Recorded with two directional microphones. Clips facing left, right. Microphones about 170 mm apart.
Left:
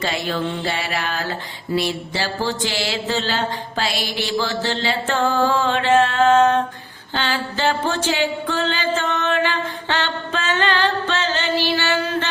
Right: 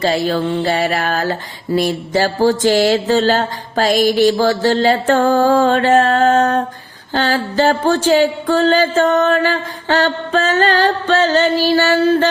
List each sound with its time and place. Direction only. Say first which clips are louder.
0.0 s mantra: right 7 dB; 35° right (ahead or behind)
7.1 s music: right 7 dB; 40° right (ahead or behind)